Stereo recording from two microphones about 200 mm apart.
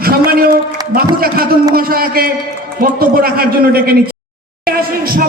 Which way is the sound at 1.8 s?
45° right (ahead or behind).